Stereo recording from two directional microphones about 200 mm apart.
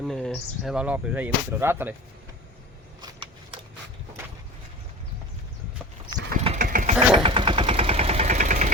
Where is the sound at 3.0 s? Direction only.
25° right (ahead or behind).